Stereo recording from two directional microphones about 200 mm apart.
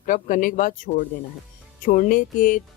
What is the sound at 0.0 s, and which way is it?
Speech, 40° left (ahead or behind).